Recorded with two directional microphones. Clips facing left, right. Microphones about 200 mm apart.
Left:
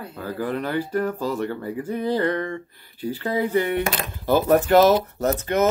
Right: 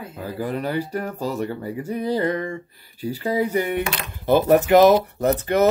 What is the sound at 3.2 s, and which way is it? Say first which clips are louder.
Speech: even; 10° right (ahead or behind).